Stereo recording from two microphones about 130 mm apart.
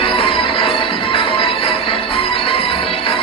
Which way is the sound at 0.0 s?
40° left (ahead or behind).